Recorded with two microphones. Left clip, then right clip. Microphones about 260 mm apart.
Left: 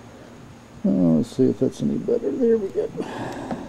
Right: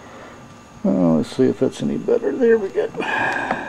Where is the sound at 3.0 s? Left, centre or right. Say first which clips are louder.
Right 10 dB; centre.